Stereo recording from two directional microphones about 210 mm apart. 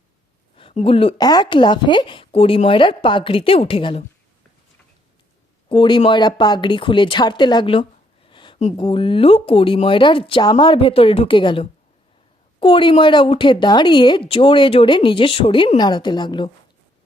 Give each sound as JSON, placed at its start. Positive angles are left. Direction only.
{"t": 0.5, "sound": "a woman's voice", "side_deg": 30}
{"t": 5.6, "sound": "a woman's voice", "side_deg": 25}